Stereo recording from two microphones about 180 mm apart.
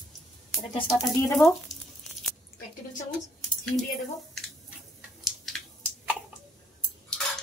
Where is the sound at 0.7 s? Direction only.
20° left (ahead or behind).